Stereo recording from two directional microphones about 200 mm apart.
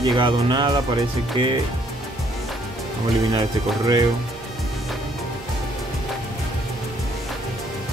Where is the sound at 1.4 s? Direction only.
25° right (ahead or behind).